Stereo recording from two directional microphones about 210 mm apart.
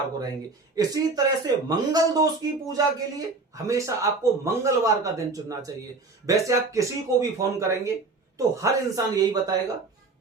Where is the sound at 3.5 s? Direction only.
15° right (ahead or behind).